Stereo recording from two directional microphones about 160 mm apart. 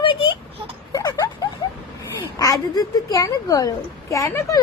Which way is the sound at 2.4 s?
20° left (ahead or behind).